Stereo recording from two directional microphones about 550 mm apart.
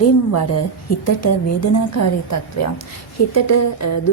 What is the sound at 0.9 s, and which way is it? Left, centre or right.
A woman's voice, left.